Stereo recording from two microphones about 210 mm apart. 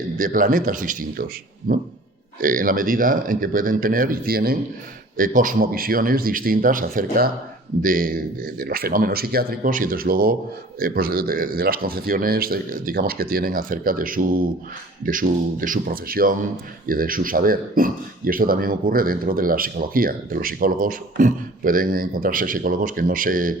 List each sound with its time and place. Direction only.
0.2 s speech: 40° right (ahead or behind)